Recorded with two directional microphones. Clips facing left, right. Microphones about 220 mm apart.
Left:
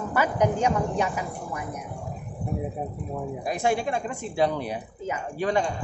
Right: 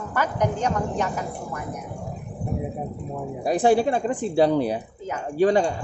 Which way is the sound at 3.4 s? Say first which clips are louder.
Right 7 dB; 30° right (ahead or behind).